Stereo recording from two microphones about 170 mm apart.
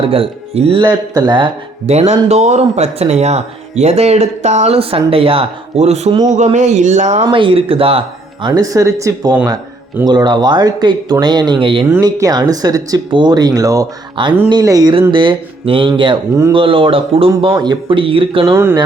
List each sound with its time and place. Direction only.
0.0 s speech: 30° right (ahead or behind)
1.9 s speech: 40° right (ahead or behind)
7.3 s speech: 30° right (ahead or behind)
11.9 s speech: 20° right (ahead or behind)
18.5 s speech: 15° right (ahead or behind)